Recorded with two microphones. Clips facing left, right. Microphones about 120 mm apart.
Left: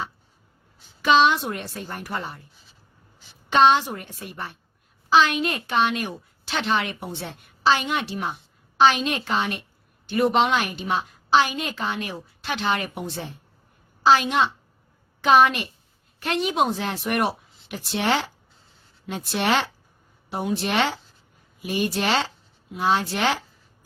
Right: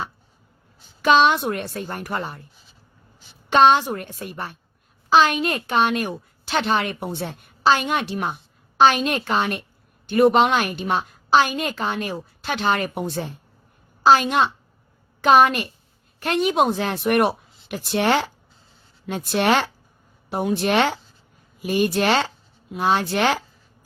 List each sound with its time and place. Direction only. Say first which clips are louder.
1.0 s a woman's voice: right 2 dB; 50° right (ahead or behind)
3.5 s a woman's voice: right 2 dB; 50° right (ahead or behind)